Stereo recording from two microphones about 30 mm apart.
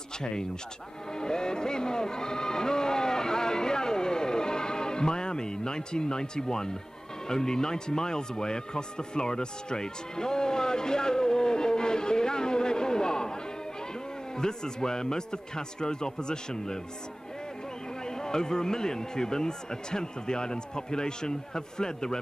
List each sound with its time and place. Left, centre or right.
1.1 s a man's voice: left
18.0 s a man's voice: left